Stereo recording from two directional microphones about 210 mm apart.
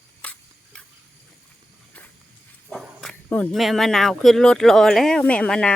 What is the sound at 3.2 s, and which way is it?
Speech, 5° left (ahead or behind).